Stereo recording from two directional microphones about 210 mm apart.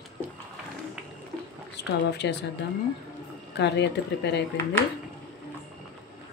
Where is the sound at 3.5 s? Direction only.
55° left (ahead or behind).